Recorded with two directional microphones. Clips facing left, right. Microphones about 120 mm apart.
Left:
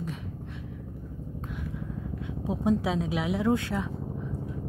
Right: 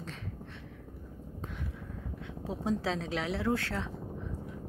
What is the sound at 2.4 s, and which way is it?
A woman's voice, 15° left (ahead or behind).